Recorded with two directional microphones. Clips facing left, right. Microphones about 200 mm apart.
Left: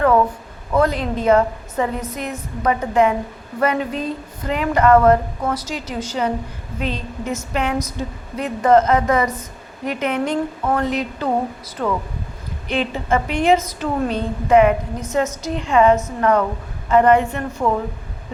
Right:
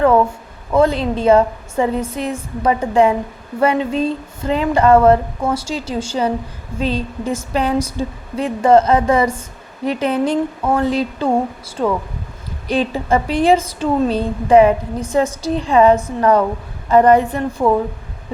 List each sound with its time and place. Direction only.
0.7 s a woman's voice: 25° right (ahead or behind)